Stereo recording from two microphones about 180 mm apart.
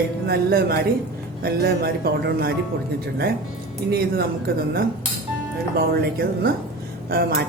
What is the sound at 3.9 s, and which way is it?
Speech, 60° right (ahead or behind).